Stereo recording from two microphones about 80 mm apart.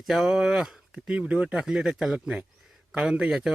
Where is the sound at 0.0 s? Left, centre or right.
Centre.